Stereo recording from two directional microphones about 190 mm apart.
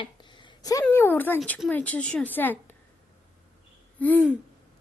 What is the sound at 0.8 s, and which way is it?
Speech, 10° left (ahead or behind).